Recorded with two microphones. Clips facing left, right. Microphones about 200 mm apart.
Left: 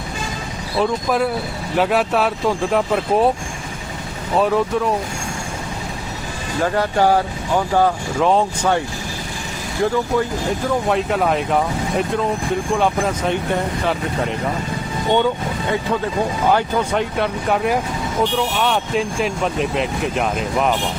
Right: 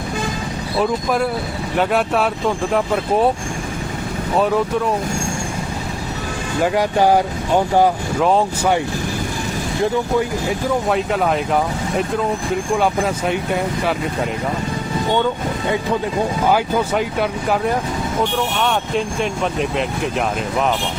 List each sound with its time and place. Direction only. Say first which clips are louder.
0.8 s speech: even; centre (ahead or behind)
4.4 s speech: even; centre (ahead or behind)
6.6 s speech: right 1 dB; 15° right (ahead or behind)
8.2 s speech: even; centre (ahead or behind)
10.8 s speech: left 1 dB; centre (ahead or behind)
16.5 s speech: even; 5° right (ahead or behind)